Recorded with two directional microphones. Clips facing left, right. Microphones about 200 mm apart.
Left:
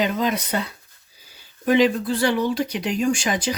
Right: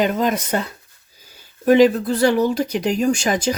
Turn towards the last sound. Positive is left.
turn(degrees=-45)  # may be behind; listen again after turning